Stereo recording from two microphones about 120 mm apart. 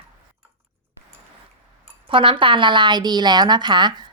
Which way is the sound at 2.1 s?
45° right (ahead or behind).